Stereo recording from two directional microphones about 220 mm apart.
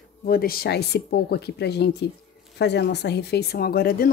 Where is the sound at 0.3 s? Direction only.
45° left (ahead or behind).